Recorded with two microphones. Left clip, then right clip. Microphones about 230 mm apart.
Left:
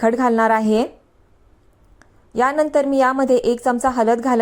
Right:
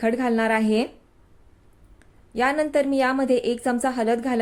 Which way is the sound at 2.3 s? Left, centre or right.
Centre.